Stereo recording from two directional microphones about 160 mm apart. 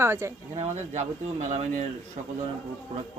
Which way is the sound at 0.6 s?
45° right (ahead or behind).